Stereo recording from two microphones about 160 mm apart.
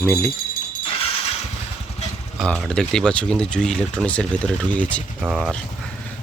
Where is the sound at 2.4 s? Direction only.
5° left (ahead or behind).